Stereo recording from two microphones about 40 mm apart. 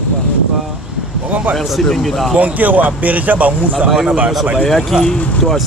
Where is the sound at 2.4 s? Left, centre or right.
Right.